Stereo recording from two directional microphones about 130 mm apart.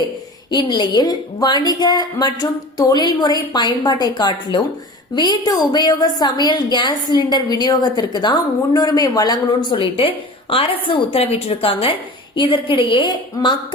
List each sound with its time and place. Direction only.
0.5 s a woman's voice: 35° left (ahead or behind)